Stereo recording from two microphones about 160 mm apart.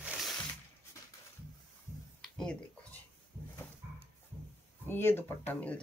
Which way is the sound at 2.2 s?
5° left (ahead or behind).